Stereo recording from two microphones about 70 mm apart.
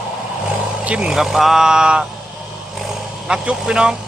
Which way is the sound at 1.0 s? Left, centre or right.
Centre.